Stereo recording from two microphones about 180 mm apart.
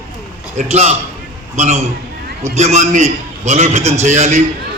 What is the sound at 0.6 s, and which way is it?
A man's voice, 40° right (ahead or behind).